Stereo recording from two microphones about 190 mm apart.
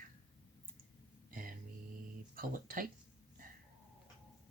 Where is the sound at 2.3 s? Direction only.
45° right (ahead or behind).